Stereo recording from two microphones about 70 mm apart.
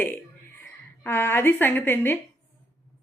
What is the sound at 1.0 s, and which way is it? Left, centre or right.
A woman's voice, left.